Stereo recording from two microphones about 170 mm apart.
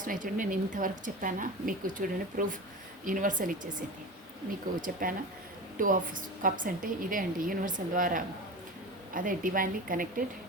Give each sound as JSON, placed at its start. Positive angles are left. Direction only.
{"t": 0.0, "sound": "a woman's voice", "side_deg": -50}
{"t": 4.9, "sound": "a woman's voice", "side_deg": -55}